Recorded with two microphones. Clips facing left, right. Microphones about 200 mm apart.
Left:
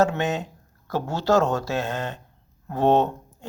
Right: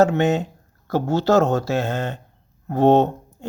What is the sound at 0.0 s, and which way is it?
Speech, 25° right (ahead or behind).